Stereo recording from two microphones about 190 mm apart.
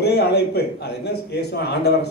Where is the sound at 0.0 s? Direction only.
60° left (ahead or behind).